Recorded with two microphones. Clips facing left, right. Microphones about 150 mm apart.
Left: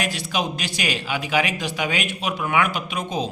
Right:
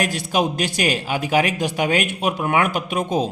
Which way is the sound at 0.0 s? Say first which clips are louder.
Right 5 dB; 45° right (ahead or behind).